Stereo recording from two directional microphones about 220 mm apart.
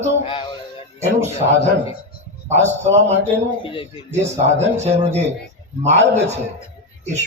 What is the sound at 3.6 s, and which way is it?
Speech, 25° left (ahead or behind).